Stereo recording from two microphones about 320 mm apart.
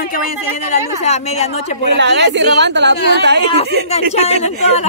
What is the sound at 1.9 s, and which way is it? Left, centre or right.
Speech, right.